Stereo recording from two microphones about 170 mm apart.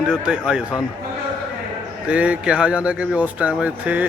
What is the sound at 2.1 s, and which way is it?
Speech, 5° right (ahead or behind).